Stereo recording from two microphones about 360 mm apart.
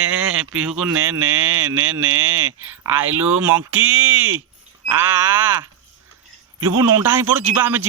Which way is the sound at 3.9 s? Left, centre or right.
Right.